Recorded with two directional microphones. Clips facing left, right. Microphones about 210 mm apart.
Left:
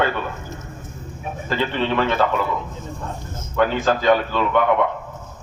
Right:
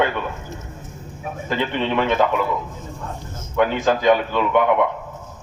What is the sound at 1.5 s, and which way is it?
Speech, 15° right (ahead or behind).